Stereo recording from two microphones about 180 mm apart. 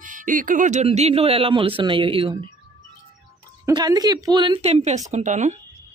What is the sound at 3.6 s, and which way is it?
A woman's voice, 20° right (ahead or behind).